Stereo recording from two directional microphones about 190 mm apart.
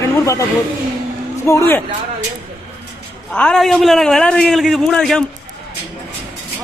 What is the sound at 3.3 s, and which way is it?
A man's voice, 5° left (ahead or behind).